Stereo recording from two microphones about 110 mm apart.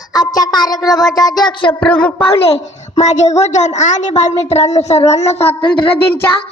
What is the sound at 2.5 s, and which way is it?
A woman's voice, 80° left.